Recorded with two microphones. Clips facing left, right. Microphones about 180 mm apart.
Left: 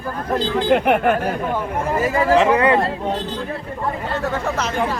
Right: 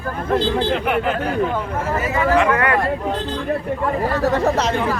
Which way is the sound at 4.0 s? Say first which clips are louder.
Right 7 dB; 35° right (ahead or behind).